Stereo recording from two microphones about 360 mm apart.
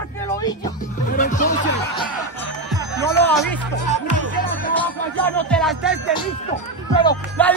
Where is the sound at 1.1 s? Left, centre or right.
Left.